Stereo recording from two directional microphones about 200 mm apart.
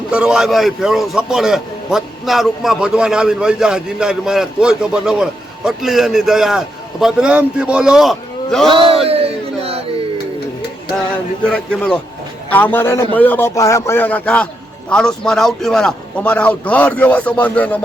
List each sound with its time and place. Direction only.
0.1 s a man's voice: 5° right (ahead or behind)
8.6 s speech: 25° right (ahead or behind)
9.0 s a sound: 30° right (ahead or behind)
11.5 s a man's voice: 5° left (ahead or behind)